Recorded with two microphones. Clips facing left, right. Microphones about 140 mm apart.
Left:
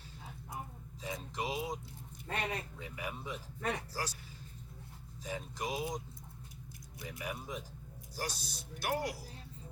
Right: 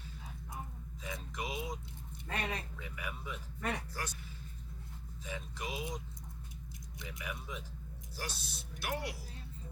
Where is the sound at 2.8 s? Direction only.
30° left (ahead or behind).